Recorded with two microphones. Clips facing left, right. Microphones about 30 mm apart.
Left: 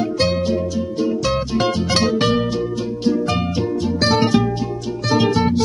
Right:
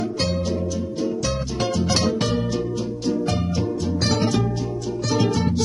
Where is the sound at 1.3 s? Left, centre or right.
Left.